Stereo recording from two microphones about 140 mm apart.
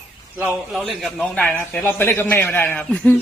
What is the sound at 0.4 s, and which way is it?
Speech, 5° right (ahead or behind).